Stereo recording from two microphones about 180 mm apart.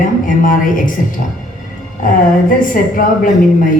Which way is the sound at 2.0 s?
50° left (ahead or behind).